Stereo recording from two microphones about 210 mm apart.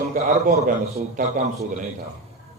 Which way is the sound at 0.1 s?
35° right (ahead or behind).